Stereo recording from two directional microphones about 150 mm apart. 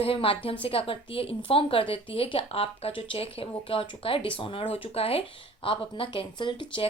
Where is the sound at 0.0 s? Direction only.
40° left (ahead or behind).